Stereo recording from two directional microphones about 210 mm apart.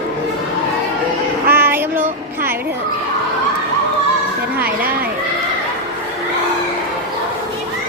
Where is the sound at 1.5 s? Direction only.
10° right (ahead or behind).